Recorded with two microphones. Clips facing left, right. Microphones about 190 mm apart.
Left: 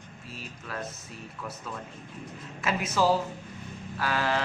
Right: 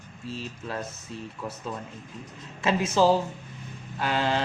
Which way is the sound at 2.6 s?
25° right (ahead or behind).